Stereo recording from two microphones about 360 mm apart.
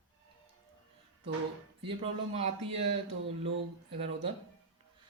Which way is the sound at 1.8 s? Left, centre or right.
Centre.